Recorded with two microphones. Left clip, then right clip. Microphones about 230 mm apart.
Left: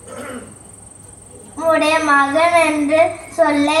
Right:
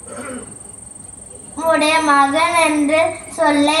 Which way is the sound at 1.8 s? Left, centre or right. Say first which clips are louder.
Right 1 dB; right.